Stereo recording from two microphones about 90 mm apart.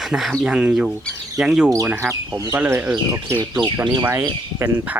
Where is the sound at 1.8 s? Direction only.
20° right (ahead or behind).